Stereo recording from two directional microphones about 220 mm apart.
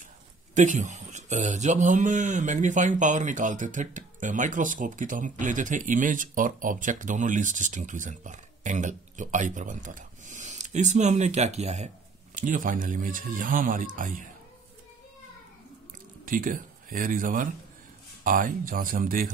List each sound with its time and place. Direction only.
0.6 s speech: 35° right (ahead or behind)
16.3 s speech: 40° right (ahead or behind)